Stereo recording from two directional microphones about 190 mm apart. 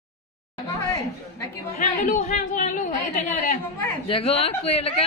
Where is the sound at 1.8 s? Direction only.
45° left (ahead or behind).